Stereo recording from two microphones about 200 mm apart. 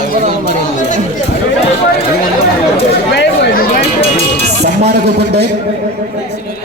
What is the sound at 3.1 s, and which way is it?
Speech, 60° left (ahead or behind).